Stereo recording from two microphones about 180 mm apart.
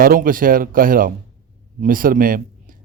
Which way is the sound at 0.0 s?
50° right (ahead or behind).